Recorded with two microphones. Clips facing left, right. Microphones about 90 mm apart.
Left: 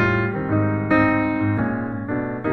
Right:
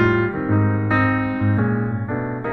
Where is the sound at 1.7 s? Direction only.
Centre (ahead or behind).